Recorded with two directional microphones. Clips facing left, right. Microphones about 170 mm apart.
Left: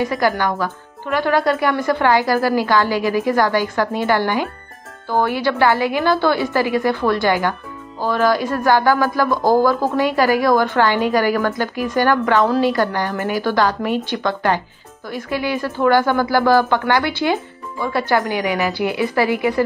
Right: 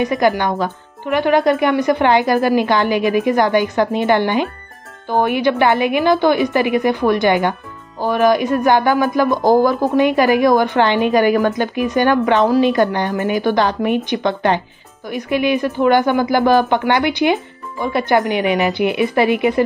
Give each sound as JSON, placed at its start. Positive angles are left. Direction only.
{"t": 0.0, "sound": "speech", "side_deg": -20}